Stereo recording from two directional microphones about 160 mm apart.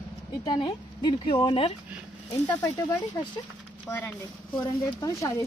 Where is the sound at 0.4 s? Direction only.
25° left (ahead or behind).